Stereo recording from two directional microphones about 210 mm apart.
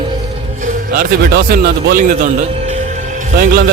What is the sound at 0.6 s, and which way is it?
Speech, 45° right (ahead or behind).